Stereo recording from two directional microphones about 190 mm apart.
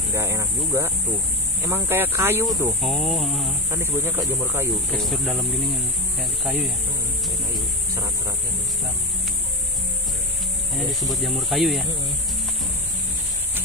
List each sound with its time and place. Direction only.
0.1 s speech: 15° right (ahead or behind)
2.8 s speech: centre (ahead or behind)
3.7 s speech: 10° right (ahead or behind)
4.9 s speech: centre (ahead or behind)
10.7 s speech: centre (ahead or behind)